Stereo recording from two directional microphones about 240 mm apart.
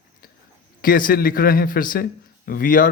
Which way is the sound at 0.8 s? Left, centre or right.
Left.